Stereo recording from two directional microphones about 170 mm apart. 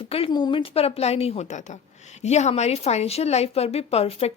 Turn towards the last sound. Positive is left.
turn(degrees=35)  # may be behind; listen again after turning